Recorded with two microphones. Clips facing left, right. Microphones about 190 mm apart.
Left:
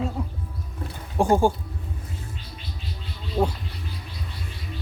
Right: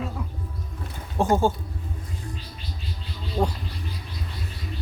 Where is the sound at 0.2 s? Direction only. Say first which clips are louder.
Left 4 dB; 30° left (ahead or behind).